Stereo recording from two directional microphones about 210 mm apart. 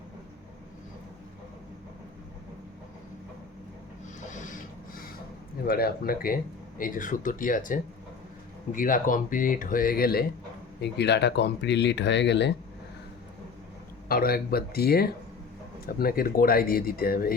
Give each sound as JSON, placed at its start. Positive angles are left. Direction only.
{"t": 5.6, "sound": "speech", "side_deg": 45}
{"t": 14.1, "sound": "speech", "side_deg": 45}